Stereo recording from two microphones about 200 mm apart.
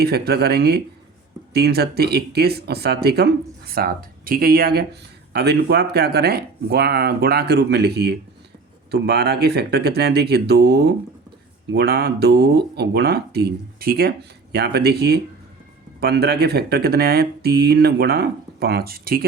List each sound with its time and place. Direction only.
0.0 s speech: 50° right (ahead or behind)